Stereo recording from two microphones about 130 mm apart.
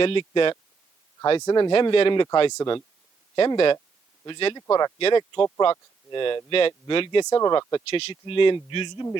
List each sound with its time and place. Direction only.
0.0 s speech: 40° left (ahead or behind)
1.4 s speech: 30° left (ahead or behind)
4.9 s speech: 45° left (ahead or behind)
7.3 s speech: 25° left (ahead or behind)